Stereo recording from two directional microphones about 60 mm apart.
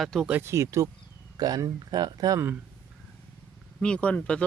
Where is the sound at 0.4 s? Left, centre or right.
Right.